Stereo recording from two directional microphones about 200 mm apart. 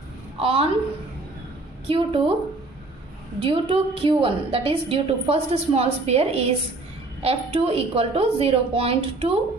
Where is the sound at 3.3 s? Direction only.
25° right (ahead or behind).